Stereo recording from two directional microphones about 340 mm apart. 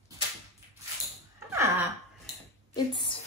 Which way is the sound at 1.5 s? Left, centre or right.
Centre.